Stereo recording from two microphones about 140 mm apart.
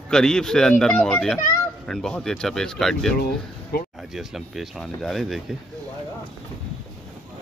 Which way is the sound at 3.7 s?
90° left.